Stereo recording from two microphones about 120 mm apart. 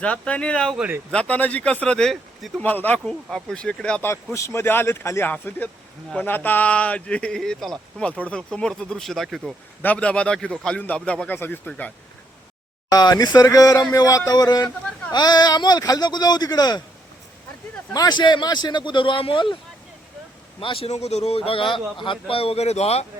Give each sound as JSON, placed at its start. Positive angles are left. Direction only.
{"t": 0.0, "sound": "speech", "side_deg": 10}
{"t": 0.8, "sound": "speech", "side_deg": -15}
{"t": 1.1, "sound": "speech", "side_deg": 10}
{"t": 3.1, "sound": "speech", "side_deg": 5}
{"t": 4.1, "sound": "speech", "side_deg": 25}
{"t": 9.8, "sound": "speech", "side_deg": 10}
{"t": 12.9, "sound": "speech", "side_deg": 35}
{"t": 17.9, "sound": "speech", "side_deg": 35}
{"t": 20.6, "sound": "a man's voice", "side_deg": 45}